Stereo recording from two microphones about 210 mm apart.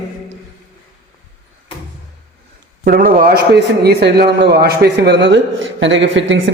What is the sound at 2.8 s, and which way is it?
A man's voice, 45° right (ahead or behind).